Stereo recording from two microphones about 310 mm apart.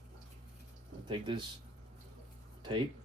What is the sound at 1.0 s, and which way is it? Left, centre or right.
Speech, centre.